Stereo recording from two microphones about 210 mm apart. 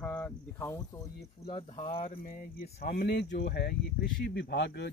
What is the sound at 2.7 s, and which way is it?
Speech, 45° left (ahead or behind).